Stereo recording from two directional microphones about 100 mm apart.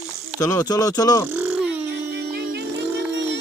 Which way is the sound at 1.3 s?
20° right (ahead or behind).